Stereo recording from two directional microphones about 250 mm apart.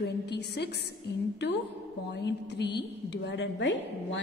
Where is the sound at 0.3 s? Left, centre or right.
Left.